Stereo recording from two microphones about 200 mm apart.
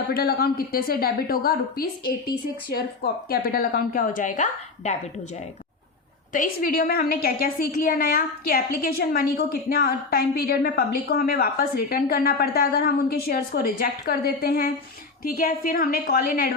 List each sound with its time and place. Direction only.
0.1 s a woman's voice: 50° left (ahead or behind)
6.3 s a woman's voice: 45° left (ahead or behind)